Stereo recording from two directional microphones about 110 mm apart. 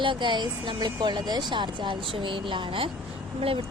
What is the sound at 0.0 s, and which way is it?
Speech, 45° right (ahead or behind).